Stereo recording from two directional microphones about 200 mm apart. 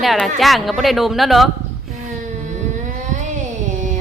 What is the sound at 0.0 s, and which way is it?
A woman's voice, centre (ahead or behind).